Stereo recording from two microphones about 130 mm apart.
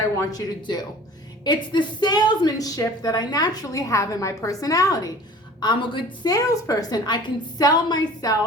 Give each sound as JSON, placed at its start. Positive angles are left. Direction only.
{"t": 0.2, "sound": "a woman's voice", "side_deg": 30}
{"t": 6.3, "sound": "a woman's voice", "side_deg": 25}